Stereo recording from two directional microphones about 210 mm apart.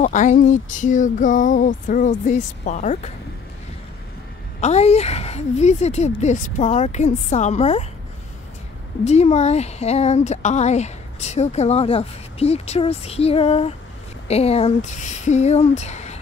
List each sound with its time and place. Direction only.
0.0 s speech: 35° left (ahead or behind)
4.6 s speech: 30° left (ahead or behind)
9.0 s speech: 30° left (ahead or behind)